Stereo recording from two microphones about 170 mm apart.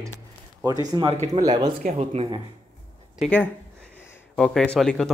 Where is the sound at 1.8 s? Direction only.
40° right (ahead or behind).